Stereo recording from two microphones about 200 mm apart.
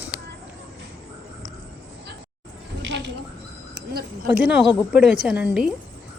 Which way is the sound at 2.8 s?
65° right (ahead or behind).